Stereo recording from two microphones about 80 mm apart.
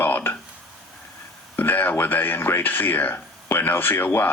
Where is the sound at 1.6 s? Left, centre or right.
Left.